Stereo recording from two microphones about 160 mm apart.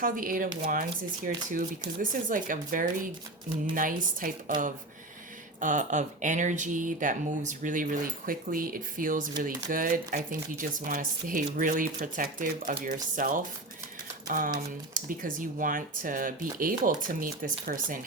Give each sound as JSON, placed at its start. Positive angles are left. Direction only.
{"t": 0.0, "sound": "speech", "side_deg": -60}